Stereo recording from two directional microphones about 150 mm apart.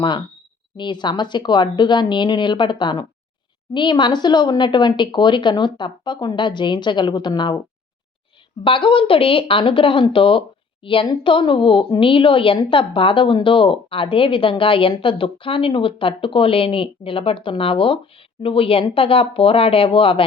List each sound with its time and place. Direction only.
0.0 s speech: 30° left (ahead or behind)
8.6 s speech: 35° left (ahead or behind)